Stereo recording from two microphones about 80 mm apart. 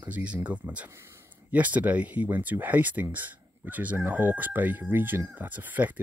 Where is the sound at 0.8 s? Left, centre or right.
Right.